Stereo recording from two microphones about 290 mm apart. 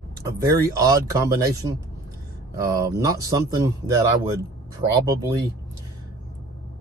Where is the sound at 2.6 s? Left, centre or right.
Centre.